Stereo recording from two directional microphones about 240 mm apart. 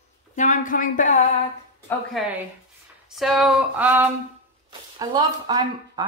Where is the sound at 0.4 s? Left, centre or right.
Left.